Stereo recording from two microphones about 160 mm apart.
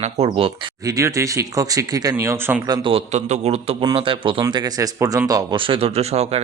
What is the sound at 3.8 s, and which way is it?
Speech, 30° right (ahead or behind).